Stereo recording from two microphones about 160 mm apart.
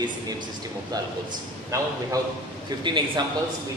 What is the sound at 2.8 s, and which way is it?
Speech, 30° right (ahead or behind).